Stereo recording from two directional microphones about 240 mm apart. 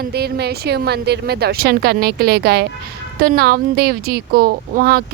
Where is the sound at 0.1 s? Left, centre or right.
Right.